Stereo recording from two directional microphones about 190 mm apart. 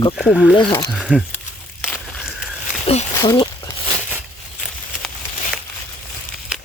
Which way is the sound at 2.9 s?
30° left (ahead or behind).